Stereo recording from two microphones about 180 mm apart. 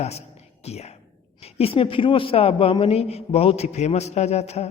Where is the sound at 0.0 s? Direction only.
35° left (ahead or behind).